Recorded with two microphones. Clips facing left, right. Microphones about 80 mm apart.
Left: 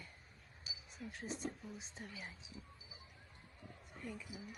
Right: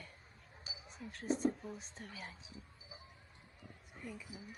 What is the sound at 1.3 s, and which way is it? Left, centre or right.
Speech, right.